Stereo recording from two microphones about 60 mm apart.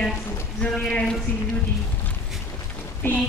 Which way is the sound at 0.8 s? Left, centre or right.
Centre.